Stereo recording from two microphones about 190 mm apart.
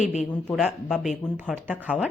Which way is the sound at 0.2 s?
5° left (ahead or behind).